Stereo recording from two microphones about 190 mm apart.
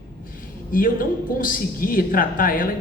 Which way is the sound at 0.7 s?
45° left (ahead or behind).